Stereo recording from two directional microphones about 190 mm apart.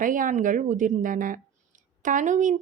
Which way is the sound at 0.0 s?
45° right (ahead or behind).